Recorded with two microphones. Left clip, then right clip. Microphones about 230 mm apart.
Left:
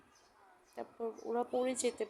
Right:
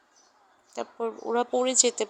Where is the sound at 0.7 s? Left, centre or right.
Right.